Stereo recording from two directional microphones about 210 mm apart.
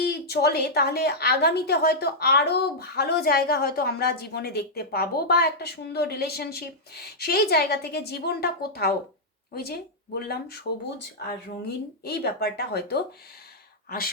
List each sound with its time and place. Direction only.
0.0 s a woman's voice: 50° left (ahead or behind)